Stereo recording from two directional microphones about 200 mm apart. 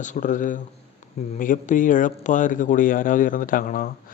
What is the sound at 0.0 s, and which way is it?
Speech, 40° left (ahead or behind).